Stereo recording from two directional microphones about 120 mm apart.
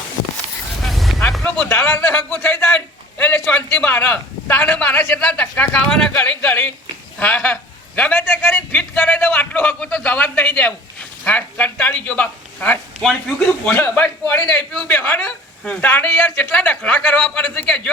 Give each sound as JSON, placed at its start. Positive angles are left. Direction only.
{"t": 0.9, "sound": "vehicle", "side_deg": 0}
{"t": 1.5, "sound": "a man's voice", "side_deg": 15}